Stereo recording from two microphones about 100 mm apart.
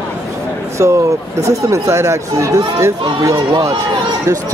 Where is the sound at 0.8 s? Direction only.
30° right (ahead or behind).